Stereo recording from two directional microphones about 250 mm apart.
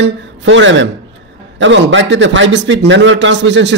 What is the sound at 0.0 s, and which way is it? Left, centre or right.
A man's voice, right.